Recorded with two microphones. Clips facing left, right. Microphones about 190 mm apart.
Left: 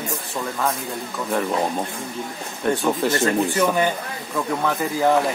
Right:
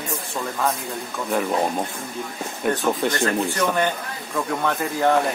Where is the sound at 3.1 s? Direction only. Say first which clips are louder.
Left 2 dB; 20° left (ahead or behind).